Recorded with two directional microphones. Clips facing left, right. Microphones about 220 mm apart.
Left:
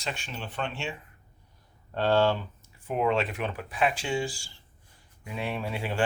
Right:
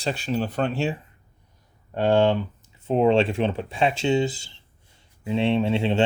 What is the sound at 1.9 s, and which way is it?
Speech, 15° right (ahead or behind).